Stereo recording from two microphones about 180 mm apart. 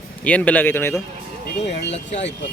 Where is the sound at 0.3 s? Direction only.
10° left (ahead or behind).